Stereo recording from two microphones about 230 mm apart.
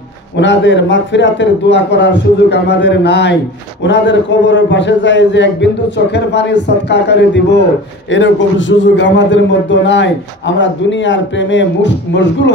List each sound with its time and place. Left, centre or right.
0.4 s a man's voice: left